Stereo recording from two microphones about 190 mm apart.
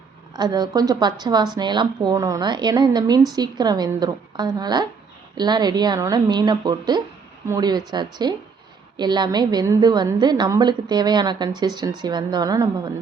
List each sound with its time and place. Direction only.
0.3 s a woman's voice: 20° right (ahead or behind)